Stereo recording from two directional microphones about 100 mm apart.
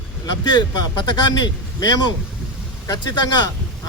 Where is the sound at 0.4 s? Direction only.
45° left (ahead or behind).